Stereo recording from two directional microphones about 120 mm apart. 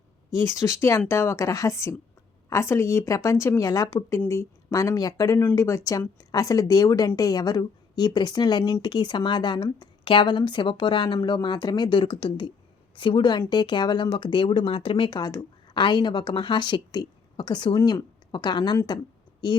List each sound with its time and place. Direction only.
0.3 s a woman's voice: 25° left (ahead or behind)